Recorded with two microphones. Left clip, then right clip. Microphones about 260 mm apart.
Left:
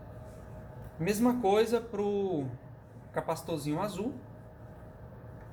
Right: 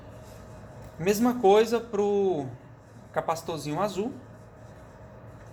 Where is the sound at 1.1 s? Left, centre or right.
Right.